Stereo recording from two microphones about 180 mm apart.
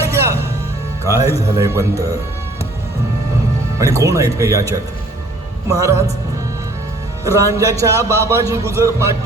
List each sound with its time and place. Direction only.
1.0 s a man's voice: 20° right (ahead or behind)
3.8 s a man's voice: 15° right (ahead or behind)
7.3 s a man's voice: 15° right (ahead or behind)